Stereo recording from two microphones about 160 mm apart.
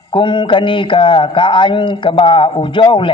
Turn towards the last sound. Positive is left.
turn(degrees=30)  # may be behind; listen again after turning